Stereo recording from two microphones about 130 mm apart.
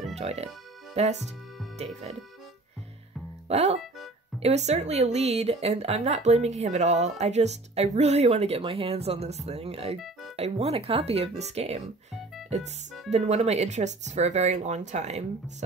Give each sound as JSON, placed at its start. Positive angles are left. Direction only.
{"t": 0.1, "sound": "speech", "side_deg": -55}
{"t": 3.4, "sound": "speech", "side_deg": -55}
{"t": 9.9, "sound": "music", "side_deg": 0}
{"t": 10.3, "sound": "speech", "side_deg": -50}
{"t": 13.1, "sound": "speech", "side_deg": -55}